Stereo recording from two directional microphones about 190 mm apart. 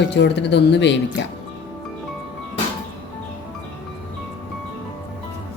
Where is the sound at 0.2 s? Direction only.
65° left (ahead or behind).